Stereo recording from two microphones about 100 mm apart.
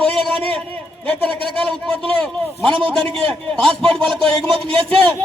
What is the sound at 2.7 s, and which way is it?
Speech, 60° right (ahead or behind).